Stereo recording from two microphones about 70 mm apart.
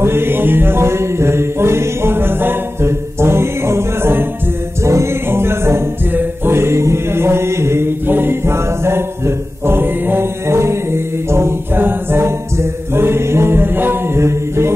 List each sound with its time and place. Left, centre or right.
0.0 s music: right
4.8 s a capella: right